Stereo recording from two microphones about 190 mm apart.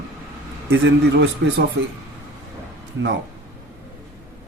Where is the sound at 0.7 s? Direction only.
65° right (ahead or behind).